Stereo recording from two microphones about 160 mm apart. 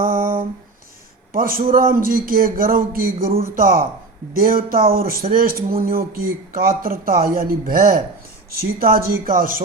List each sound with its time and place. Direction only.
1.3 s speech: 65° right (ahead or behind)